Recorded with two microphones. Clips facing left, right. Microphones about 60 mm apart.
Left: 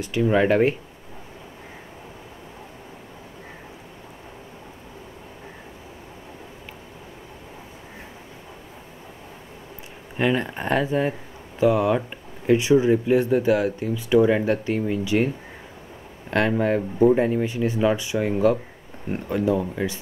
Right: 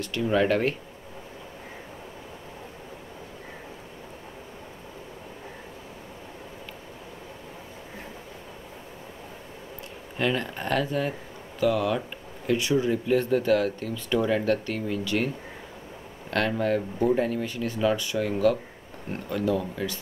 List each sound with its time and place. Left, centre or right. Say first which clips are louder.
0.0 s speech: left 4 dB; centre
10.1 s speech: left 4 dB; centre